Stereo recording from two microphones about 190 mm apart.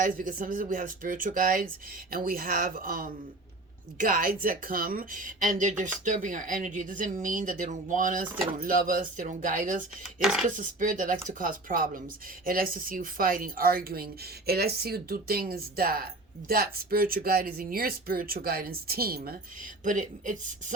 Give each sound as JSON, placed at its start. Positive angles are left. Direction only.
{"t": 0.0, "sound": "a woman's voice", "side_deg": -45}
{"t": 10.2, "sound": "speech", "side_deg": 0}
{"t": 10.5, "sound": "a woman's voice", "side_deg": -45}
{"t": 19.8, "sound": "speech", "side_deg": -40}